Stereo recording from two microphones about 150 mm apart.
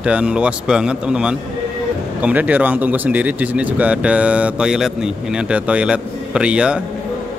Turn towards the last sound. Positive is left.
turn(degrees=-5)  # may be behind; listen again after turning